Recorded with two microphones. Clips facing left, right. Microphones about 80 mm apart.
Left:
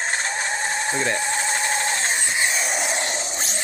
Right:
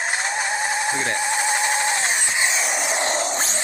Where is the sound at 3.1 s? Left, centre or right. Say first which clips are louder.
Right 6 dB; right.